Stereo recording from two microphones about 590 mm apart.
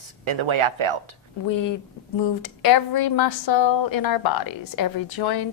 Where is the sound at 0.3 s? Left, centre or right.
Right.